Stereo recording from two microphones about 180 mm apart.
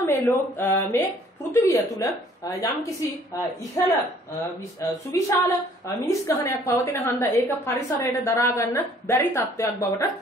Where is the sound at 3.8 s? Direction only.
20° left (ahead or behind).